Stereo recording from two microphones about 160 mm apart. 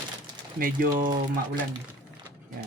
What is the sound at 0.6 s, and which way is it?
Speech, 60° right (ahead or behind).